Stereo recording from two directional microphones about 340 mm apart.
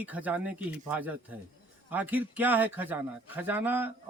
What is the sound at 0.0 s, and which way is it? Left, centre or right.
A man's voice, centre.